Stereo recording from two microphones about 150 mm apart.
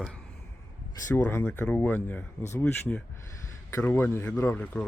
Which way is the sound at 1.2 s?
15° left (ahead or behind).